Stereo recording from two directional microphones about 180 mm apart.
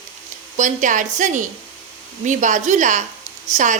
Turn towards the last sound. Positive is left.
turn(degrees=-45)  # may be behind; listen again after turning